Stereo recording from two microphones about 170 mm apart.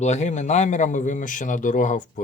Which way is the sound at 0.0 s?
45° left (ahead or behind).